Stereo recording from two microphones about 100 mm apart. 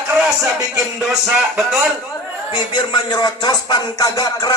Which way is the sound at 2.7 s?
50° left (ahead or behind).